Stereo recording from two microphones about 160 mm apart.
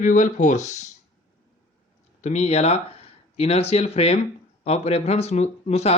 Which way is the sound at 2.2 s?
45° left (ahead or behind).